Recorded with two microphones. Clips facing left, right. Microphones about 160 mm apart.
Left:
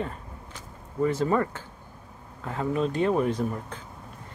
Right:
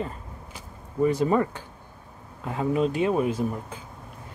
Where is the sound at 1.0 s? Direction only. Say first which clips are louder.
Right 2 dB; 15° right (ahead or behind).